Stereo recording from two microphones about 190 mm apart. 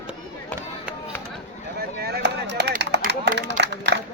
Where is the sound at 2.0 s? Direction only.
60° right (ahead or behind).